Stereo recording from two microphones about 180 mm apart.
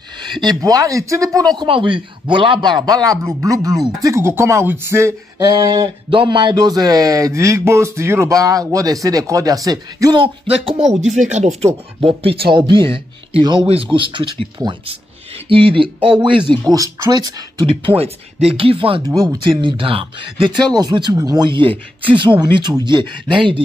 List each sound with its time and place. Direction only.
0.2 s speech: 25° right (ahead or behind)
5.5 s speech: 25° right (ahead or behind)
11.1 s speech: 40° right (ahead or behind); by 14.7 s 15° right (ahead or behind)
15.3 s speech: 30° right (ahead or behind)